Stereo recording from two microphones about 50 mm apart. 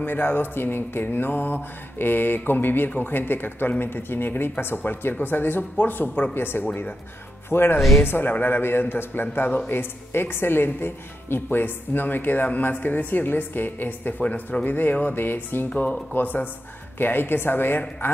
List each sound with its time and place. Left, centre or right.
0.0 s mantra: left
5.2 s speech: left
6.3 s mantra: left
11.5 s speech: left
14.2 s speech: left
15.7 s speech: left
17.0 s mantra: left